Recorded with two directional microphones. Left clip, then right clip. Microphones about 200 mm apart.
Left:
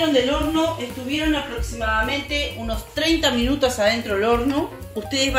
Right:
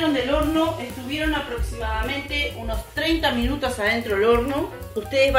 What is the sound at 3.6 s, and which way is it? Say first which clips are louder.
Speech: left 4 dB; 30° left (ahead or behind).